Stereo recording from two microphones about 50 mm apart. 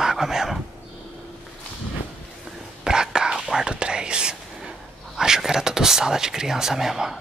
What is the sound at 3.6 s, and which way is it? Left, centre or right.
Whispering, centre.